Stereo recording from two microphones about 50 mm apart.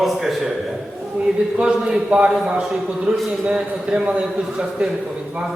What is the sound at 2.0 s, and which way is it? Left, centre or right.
Speech, right.